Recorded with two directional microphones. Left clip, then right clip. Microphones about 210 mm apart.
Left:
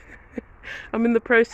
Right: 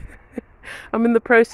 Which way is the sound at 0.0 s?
20° right (ahead or behind).